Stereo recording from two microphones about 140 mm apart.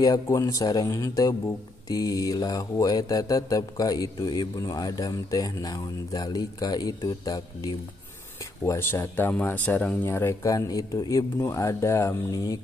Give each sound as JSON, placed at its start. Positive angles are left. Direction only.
{"t": 0.0, "sound": "mantra", "side_deg": 25}
{"t": 8.6, "sound": "mantra", "side_deg": 15}